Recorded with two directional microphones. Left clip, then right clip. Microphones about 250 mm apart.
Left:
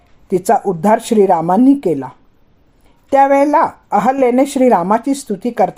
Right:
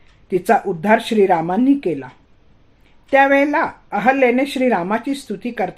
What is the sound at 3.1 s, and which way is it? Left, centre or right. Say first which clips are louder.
Speech: left 3 dB; left.